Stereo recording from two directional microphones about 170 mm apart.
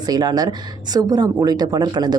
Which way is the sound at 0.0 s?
25° right (ahead or behind).